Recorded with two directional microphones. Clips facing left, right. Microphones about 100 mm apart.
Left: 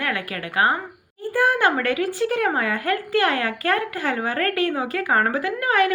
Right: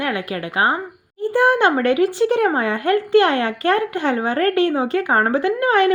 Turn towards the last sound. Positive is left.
turn(degrees=-30)  # may be behind; listen again after turning